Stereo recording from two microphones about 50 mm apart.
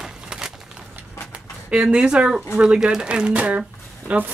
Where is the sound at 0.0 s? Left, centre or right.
Centre.